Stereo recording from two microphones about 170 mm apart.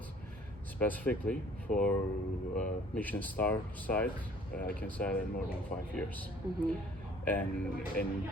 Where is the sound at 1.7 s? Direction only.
55° left (ahead or behind).